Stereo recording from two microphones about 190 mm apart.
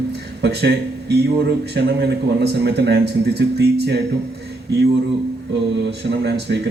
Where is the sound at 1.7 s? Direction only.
60° right (ahead or behind).